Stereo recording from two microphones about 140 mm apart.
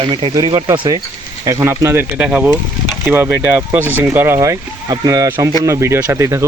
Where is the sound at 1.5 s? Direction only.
20° right (ahead or behind).